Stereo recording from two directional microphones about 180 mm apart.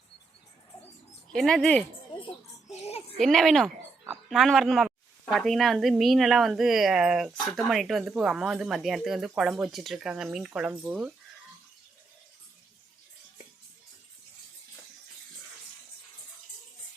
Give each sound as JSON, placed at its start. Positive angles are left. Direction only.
{"t": 1.3, "sound": "speech", "side_deg": 5}
{"t": 2.7, "sound": "a sound", "side_deg": 35}
{"t": 3.2, "sound": "speech", "side_deg": 0}